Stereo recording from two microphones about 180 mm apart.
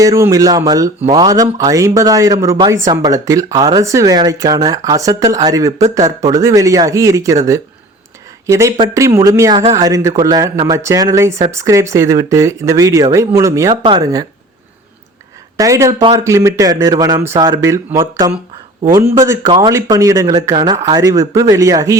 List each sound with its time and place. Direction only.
0.0 s speech: 20° right (ahead or behind)
15.5 s speech: 20° right (ahead or behind)
19.5 s speech: 30° right (ahead or behind)
19.7 s speech: 15° right (ahead or behind)